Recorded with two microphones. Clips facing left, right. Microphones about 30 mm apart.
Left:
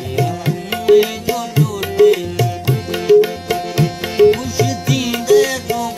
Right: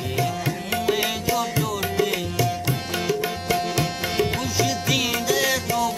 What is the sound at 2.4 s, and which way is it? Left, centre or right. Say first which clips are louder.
Music: left 5 dB; centre.